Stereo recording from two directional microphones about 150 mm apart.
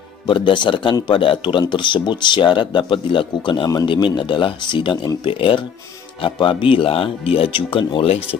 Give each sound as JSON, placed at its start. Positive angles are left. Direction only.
{"t": 0.3, "sound": "speech", "side_deg": 30}